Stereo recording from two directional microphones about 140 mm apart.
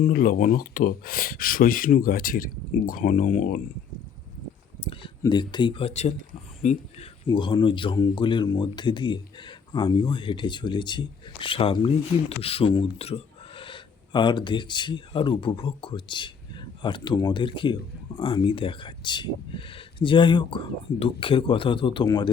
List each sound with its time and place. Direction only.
0.1 s speech: 90° left; by 3.6 s 65° left (ahead or behind)
5.2 s speech: 30° left (ahead or behind); by 7.1 s 60° left (ahead or behind)
7.3 s speech: 35° left (ahead or behind)